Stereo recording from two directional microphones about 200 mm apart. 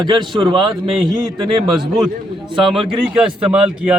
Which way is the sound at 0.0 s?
25° right (ahead or behind).